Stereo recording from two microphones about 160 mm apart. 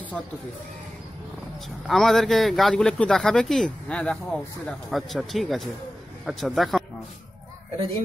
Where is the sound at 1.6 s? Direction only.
Centre (ahead or behind).